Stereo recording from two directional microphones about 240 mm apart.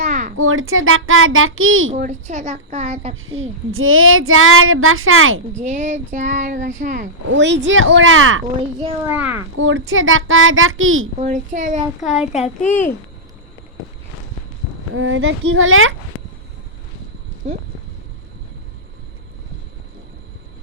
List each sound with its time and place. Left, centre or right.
0.1 s a sound: right
0.3 s speech: right
1.9 s speech: right
3.7 s speech: right
5.6 s speech: right
7.3 s speech: right
9.0 s a child's voice: centre
9.6 s speech: right
11.2 s speech: right
12.0 s a child's voice: centre
12.6 s a child's voice: centre
14.9 s speech: right
17.4 s speech: right